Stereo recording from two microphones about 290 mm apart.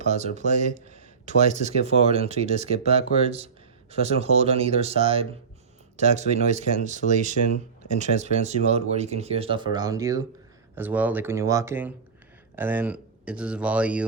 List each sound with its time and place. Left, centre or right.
0.0 s speech: right; by 14.0 s centre